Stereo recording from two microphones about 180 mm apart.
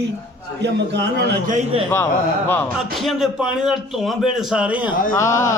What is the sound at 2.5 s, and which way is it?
A man's voice, 5° left (ahead or behind).